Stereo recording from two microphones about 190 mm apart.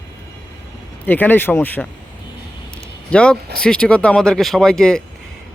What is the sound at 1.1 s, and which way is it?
Speech, 10° left (ahead or behind).